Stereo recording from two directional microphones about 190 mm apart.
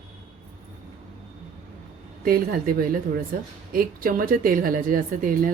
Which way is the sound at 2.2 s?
50° right (ahead or behind).